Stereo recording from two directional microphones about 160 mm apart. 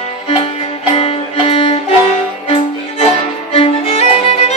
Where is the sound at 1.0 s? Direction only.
40° left (ahead or behind).